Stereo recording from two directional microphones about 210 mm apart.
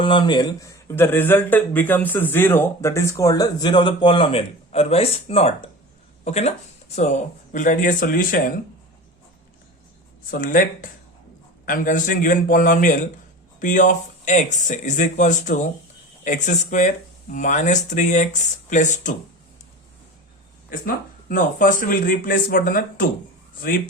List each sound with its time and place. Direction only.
0.0 s speech: 20° left (ahead or behind)
7.5 s speech: 40° left (ahead or behind)
10.3 s speech: 40° left (ahead or behind)
20.7 s speech: 40° left (ahead or behind)